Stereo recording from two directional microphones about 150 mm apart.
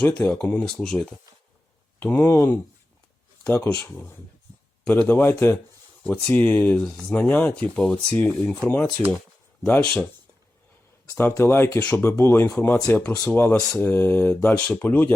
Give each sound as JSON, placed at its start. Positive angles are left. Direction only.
{"t": 0.2, "sound": "speech", "side_deg": 10}
{"t": 2.0, "sound": "speech", "side_deg": 15}
{"t": 11.1, "sound": "speech", "side_deg": 15}